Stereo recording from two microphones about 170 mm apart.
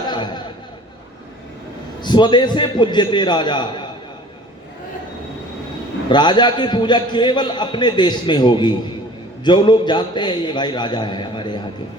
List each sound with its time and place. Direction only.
0.1 s a sound: 25° left (ahead or behind)
2.0 s a man's voice: 25° left (ahead or behind)
6.1 s a man's voice: 25° left (ahead or behind)